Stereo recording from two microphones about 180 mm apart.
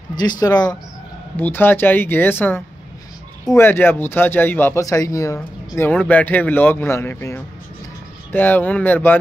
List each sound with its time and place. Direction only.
0.2 s speech: 20° left (ahead or behind)
1.3 s a man's voice: 10° left (ahead or behind)